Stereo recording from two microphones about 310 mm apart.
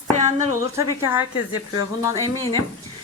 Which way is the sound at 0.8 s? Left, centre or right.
Centre.